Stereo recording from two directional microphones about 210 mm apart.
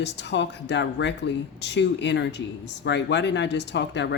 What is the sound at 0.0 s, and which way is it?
Speech, 55° left (ahead or behind).